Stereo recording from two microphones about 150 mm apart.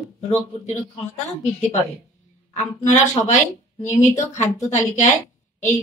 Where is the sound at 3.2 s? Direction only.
55° left (ahead or behind).